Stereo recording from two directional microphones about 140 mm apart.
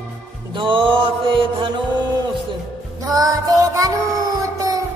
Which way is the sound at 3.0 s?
25° right (ahead or behind).